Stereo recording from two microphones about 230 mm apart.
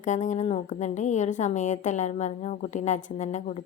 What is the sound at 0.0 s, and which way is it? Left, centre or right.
A woman's voice, left.